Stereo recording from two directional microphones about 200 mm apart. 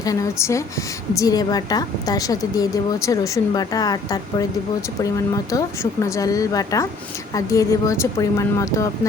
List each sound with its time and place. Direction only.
0.0 s a woman's voice: 15° left (ahead or behind)